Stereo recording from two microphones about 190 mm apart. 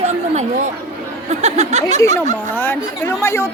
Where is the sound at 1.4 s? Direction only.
35° right (ahead or behind).